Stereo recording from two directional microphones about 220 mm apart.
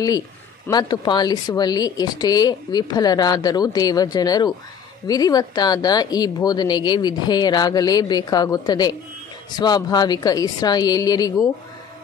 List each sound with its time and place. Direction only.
0.7 s speech: 20° left (ahead or behind)